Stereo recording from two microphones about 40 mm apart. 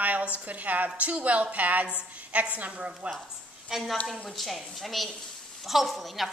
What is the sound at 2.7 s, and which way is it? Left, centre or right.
Speech, right.